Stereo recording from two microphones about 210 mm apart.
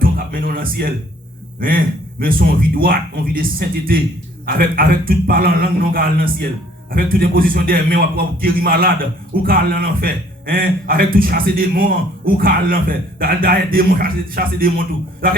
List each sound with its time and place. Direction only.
0.0 s a man's voice: 45° right (ahead or behind)